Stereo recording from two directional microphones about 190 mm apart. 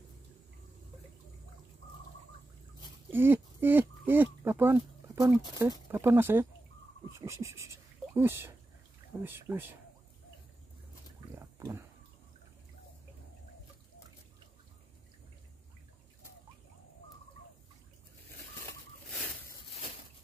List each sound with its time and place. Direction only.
3.1 s speech: 10° right (ahead or behind)
11.3 s pig: 15° right (ahead or behind)